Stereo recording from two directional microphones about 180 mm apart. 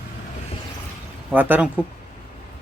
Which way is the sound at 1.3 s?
10° right (ahead or behind).